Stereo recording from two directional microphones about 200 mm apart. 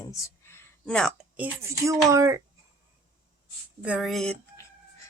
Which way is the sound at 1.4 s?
15° right (ahead or behind).